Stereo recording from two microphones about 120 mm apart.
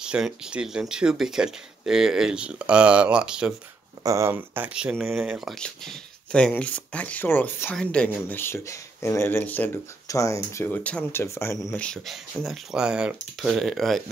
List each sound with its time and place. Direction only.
0.0 s speech: 5° right (ahead or behind)
4.0 s speech: 25° right (ahead or behind)
4.9 s speech: 5° right (ahead or behind)
5.6 s speech: 5° left (ahead or behind)
8.4 s speech: 20° left (ahead or behind)
10.0 s speech: 25° left (ahead or behind)
11.7 s speech: 5° left (ahead or behind)